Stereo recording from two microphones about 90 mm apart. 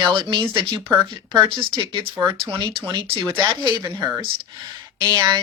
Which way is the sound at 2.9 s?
55° right (ahead or behind).